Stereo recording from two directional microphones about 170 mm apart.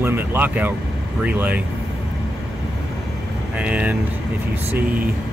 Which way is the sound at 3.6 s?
10° right (ahead or behind).